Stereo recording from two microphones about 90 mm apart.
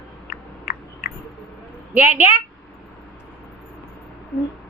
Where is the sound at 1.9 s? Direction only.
20° right (ahead or behind).